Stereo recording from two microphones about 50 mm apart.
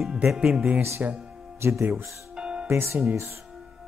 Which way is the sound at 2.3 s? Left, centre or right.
Centre.